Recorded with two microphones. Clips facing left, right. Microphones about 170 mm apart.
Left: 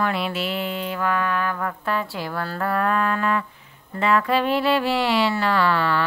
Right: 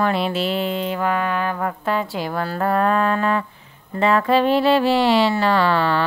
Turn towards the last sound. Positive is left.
turn(degrees=-25)  # may be behind; listen again after turning